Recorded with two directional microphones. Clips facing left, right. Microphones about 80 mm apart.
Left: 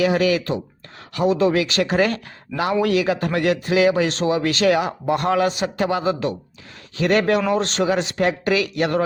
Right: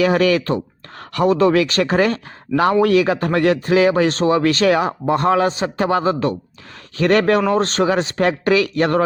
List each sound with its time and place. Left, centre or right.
0.0 s a man's voice: right